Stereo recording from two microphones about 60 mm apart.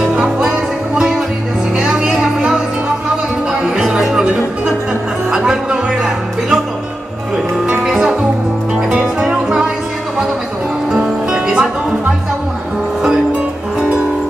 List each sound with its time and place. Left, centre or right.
0.1 s music: centre
1.8 s music: centre
3.7 s music: centre
7.8 s music: centre
10.9 s music: centre